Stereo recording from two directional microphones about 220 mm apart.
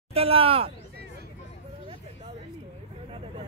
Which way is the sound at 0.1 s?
25° right (ahead or behind).